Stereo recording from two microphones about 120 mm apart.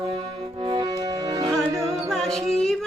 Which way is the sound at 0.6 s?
40° right (ahead or behind).